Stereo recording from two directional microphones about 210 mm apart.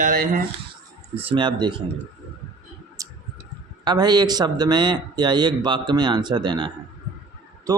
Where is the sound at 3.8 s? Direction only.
20° right (ahead or behind).